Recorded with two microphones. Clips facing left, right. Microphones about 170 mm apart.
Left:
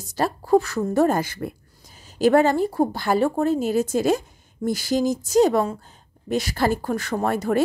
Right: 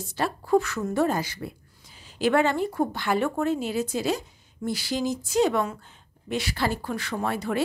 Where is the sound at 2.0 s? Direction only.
40° left (ahead or behind).